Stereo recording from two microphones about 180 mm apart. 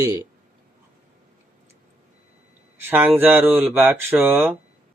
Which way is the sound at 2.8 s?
10° right (ahead or behind).